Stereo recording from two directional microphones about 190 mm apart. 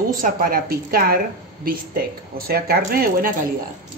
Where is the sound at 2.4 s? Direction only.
55° right (ahead or behind).